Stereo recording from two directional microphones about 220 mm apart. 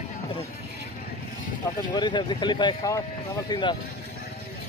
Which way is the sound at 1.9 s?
20° left (ahead or behind).